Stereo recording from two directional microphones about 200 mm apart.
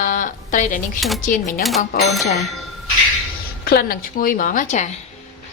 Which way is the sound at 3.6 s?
45° left (ahead or behind).